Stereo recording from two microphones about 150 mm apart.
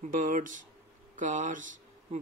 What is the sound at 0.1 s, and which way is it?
Speech, 60° right (ahead or behind).